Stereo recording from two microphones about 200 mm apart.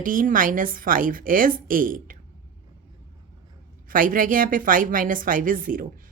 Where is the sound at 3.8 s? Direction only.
45° right (ahead or behind).